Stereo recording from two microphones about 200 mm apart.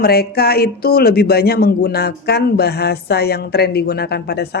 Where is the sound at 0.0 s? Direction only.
50° left (ahead or behind).